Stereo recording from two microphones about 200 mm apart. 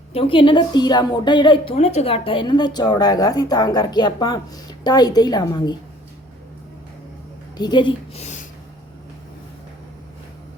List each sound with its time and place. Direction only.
0.1 s a woman's voice: 30° left (ahead or behind)
7.5 s a woman's voice: 20° left (ahead or behind)